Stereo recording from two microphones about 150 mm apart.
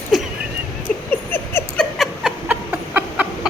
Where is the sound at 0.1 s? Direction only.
Centre (ahead or behind).